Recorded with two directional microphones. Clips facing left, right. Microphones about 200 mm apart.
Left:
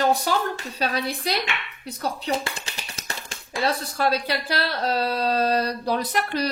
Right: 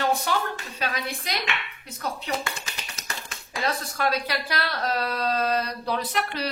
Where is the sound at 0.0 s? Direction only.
35° left (ahead or behind).